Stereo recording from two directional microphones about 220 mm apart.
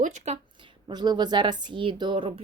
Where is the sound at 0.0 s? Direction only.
35° right (ahead or behind).